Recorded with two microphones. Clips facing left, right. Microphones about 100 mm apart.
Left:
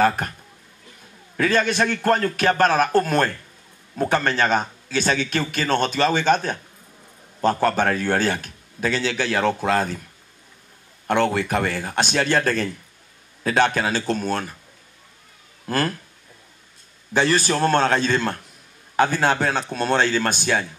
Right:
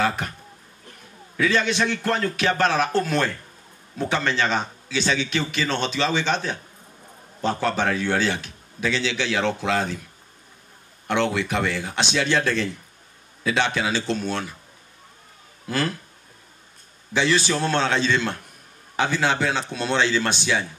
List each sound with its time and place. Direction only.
0.0 s speech: 45° left (ahead or behind)
1.3 s a man's voice: 45° left (ahead or behind)
11.1 s a man's voice: 45° left (ahead or behind)
15.6 s speech: 45° left (ahead or behind)
17.1 s a man's voice: 45° left (ahead or behind)